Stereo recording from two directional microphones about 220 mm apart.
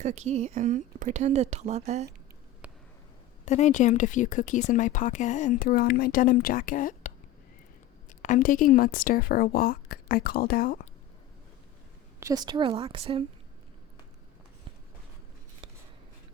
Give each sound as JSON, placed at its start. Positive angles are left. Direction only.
{"t": 0.0, "sound": "speech", "side_deg": -30}
{"t": 2.6, "sound": "a sound", "side_deg": -5}
{"t": 3.4, "sound": "speech", "side_deg": 30}
{"t": 8.2, "sound": "speech", "side_deg": 35}
{"t": 12.2, "sound": "speech", "side_deg": -20}
{"t": 15.6, "sound": "a sound", "side_deg": -20}